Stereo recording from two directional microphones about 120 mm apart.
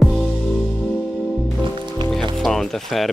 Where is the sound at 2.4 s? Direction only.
5° left (ahead or behind).